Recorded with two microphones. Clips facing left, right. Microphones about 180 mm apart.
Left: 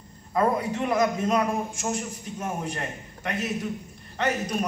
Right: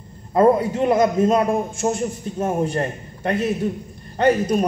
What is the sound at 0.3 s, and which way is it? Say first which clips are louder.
A man's voice: right 8 dB; 30° right (ahead or behind).